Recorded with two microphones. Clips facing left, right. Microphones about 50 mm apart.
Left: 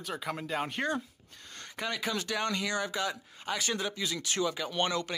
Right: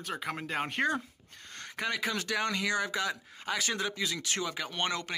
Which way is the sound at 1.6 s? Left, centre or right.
Right.